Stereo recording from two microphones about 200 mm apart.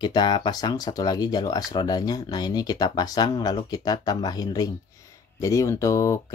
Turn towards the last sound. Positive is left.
turn(degrees=15)  # may be behind; listen again after turning